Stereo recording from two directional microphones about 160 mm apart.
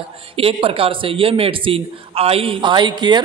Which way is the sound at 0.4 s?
35° right (ahead or behind).